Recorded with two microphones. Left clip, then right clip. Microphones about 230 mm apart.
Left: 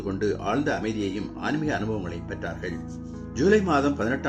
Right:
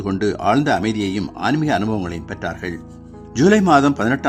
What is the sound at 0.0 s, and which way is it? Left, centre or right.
A man's voice, right.